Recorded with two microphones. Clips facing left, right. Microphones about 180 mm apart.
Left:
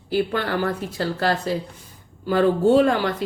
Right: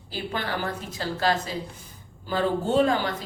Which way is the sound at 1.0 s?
60° left (ahead or behind).